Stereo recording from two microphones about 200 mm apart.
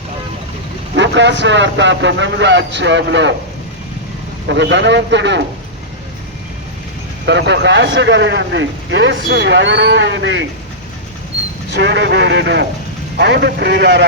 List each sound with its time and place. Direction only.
0.9 s speech: 65° right (ahead or behind)
4.4 s speech: 60° right (ahead or behind)
7.3 s speech: 60° right (ahead or behind)
11.7 s speech: 60° right (ahead or behind)